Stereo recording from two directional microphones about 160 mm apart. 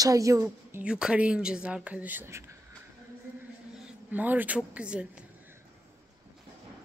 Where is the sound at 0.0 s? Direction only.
20° right (ahead or behind).